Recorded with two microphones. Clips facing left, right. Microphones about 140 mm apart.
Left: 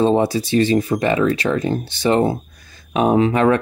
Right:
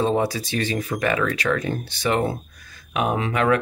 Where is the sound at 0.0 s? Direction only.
30° left (ahead or behind).